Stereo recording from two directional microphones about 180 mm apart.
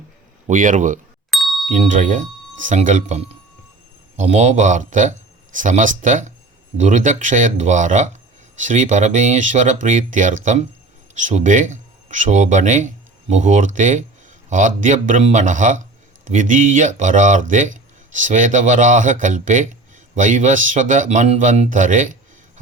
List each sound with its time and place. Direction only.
0.4 s speech: 45° right (ahead or behind)
1.3 s ding: centre (ahead or behind)
1.7 s speech: 45° right (ahead or behind)